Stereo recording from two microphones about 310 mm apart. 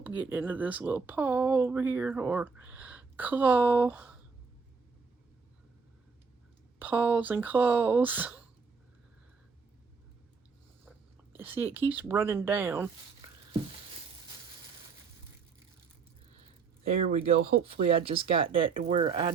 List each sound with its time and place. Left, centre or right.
0.0 s speech: centre
6.7 s speech: centre
11.3 s speech: centre
17.1 s speech: centre